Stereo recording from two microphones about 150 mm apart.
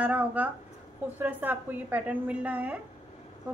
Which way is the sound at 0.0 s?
10° right (ahead or behind).